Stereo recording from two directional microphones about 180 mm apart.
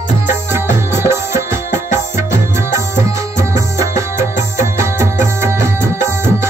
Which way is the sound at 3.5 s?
15° right (ahead or behind).